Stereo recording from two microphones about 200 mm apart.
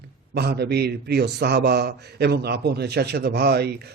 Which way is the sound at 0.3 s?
55° right (ahead or behind).